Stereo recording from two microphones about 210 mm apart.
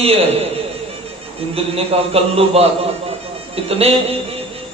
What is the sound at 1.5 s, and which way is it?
A man's voice, 30° right (ahead or behind).